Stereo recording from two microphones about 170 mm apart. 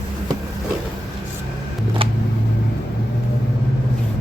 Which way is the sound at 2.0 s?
35° right (ahead or behind).